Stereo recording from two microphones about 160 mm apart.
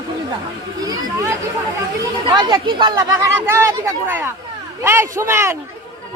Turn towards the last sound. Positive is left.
turn(degrees=-15)  # may be behind; listen again after turning